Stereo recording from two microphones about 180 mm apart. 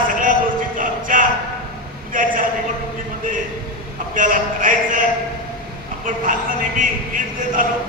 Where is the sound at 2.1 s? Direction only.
45° right (ahead or behind).